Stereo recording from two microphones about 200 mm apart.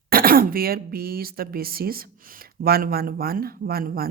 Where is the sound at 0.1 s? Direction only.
45° right (ahead or behind).